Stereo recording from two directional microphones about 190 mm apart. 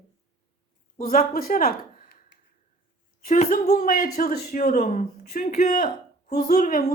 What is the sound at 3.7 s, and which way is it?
A man's voice, 50° left (ahead or behind).